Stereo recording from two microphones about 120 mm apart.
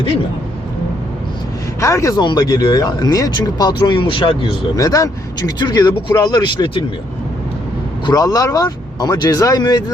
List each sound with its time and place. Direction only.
1.8 s speech: 25° left (ahead or behind)
2.1 s speech: 35° left (ahead or behind)
4.7 s speech: 30° left (ahead or behind)
8.0 s speech: 30° left (ahead or behind)